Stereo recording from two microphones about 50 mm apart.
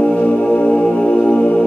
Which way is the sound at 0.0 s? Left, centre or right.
Left.